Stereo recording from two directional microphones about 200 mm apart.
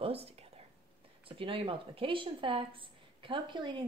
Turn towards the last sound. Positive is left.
turn(degrees=-25)  # may be behind; listen again after turning